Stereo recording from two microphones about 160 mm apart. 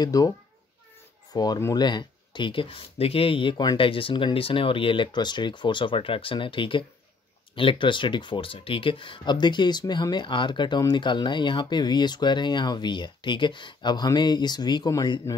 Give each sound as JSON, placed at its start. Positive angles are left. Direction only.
{"t": 0.0, "sound": "speech", "side_deg": 20}
{"t": 1.3, "sound": "speech", "side_deg": 25}